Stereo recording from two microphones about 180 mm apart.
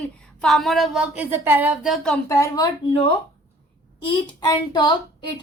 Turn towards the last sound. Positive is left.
turn(degrees=25)  # may be behind; listen again after turning